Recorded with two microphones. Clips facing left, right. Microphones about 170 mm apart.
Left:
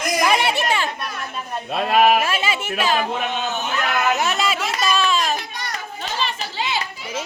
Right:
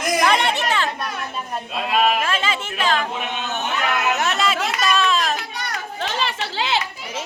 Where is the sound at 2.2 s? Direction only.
10° left (ahead or behind).